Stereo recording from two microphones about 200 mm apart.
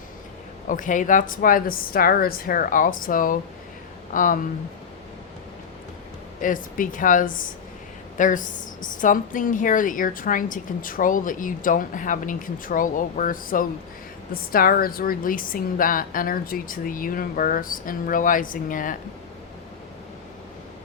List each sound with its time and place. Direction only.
0.7 s a woman's voice: 40° left (ahead or behind)
6.4 s a woman's voice: 40° left (ahead or behind)